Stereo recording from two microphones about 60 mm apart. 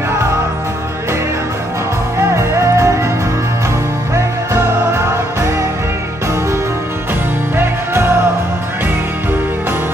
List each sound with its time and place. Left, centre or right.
2.1 s music: right
4.1 s music: right
7.5 s music: right